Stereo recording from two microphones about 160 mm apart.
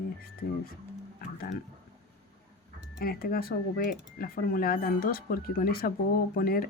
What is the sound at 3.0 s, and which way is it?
Speech, 65° left (ahead or behind).